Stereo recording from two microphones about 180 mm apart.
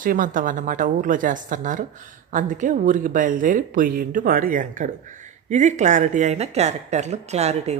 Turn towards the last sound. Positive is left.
turn(degrees=-35)  # may be behind; listen again after turning